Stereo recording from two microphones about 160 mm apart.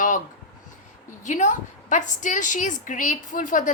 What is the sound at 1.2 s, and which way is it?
A woman's voice, 50° left (ahead or behind).